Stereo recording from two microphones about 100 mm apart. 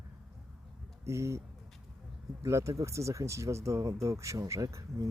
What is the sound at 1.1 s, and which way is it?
Speech, 30° right (ahead or behind).